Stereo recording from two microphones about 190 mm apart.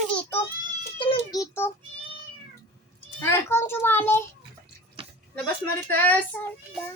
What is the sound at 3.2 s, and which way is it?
A child's voice, 15° left (ahead or behind).